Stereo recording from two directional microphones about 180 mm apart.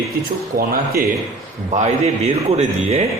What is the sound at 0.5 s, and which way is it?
Speech, 55° right (ahead or behind).